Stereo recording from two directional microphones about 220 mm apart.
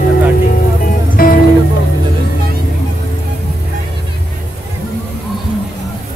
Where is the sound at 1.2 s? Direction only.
40° left (ahead or behind).